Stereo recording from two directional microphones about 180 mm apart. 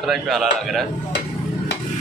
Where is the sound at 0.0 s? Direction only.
Centre (ahead or behind).